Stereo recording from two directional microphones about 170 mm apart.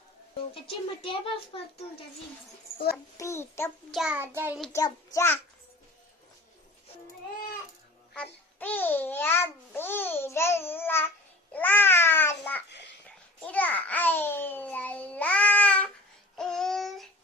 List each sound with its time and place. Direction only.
0.6 s a child's voice: 30° left (ahead or behind)
3.2 s a child's voice: 15° left (ahead or behind)
3.9 s child singing: 5° right (ahead or behind)
4.7 s a child's voice: 15° left (ahead or behind)
8.5 s babbling: 10° left (ahead or behind)